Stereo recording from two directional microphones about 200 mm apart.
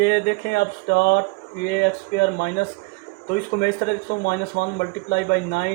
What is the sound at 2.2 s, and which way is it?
Speech, 55° left (ahead or behind).